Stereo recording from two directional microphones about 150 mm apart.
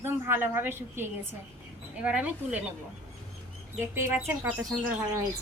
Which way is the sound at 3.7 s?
15° right (ahead or behind).